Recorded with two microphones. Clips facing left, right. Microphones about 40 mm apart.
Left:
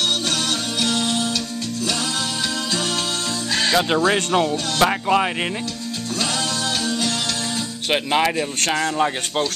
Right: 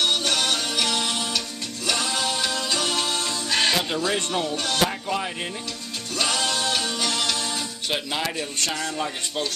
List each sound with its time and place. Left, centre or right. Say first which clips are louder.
0.3 s music: left 1 dB; right
3.7 s speech: left 6 dB; left
6.1 s music: even; right
7.9 s speech: left 9 dB; left